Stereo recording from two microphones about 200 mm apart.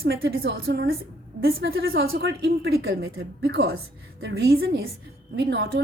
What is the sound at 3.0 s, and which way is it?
A woman's voice, 80° right.